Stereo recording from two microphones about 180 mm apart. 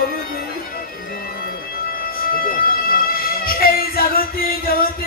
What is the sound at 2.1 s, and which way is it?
Music, 55° left (ahead or behind).